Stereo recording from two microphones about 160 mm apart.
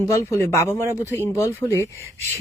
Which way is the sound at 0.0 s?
20° left (ahead or behind).